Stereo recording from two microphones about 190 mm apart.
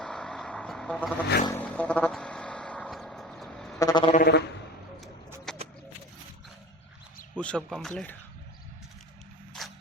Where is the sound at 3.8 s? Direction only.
20° left (ahead or behind).